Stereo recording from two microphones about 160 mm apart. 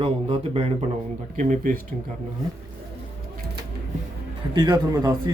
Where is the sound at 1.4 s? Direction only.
55° right (ahead or behind).